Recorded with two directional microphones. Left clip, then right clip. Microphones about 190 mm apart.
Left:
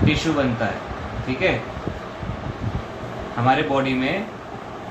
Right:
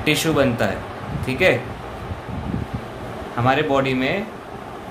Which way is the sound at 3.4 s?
65° right (ahead or behind).